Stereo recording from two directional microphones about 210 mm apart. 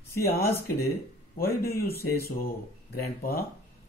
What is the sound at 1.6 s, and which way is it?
Speech, 45° left (ahead or behind).